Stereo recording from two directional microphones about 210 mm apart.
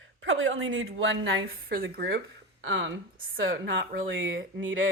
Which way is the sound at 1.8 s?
45° right (ahead or behind).